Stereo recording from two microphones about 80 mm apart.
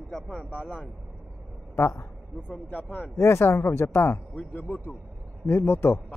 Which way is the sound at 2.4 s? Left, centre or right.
Centre.